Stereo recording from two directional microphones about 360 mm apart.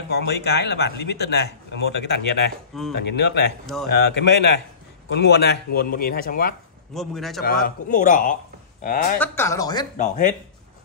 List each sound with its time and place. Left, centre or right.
0.1 s speech: left
3.6 s a man's voice: centre
3.9 s speech: left
6.9 s a man's voice: centre
7.4 s speech: left
9.2 s speech: centre